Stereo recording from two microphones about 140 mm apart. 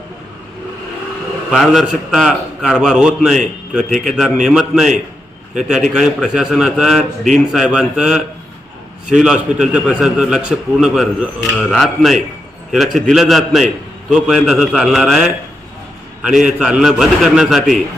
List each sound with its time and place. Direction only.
1.5 s a man's voice: centre (ahead or behind)
16.6 s a man's voice: 5° right (ahead or behind)